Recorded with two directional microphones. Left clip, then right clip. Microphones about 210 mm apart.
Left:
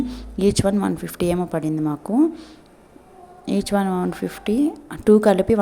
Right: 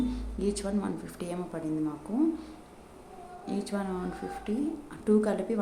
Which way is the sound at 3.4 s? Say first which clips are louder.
Left 13 dB; 40° left (ahead or behind).